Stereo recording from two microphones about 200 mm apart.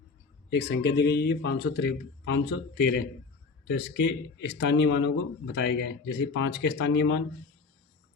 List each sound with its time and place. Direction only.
0.5 s speech: 55° left (ahead or behind)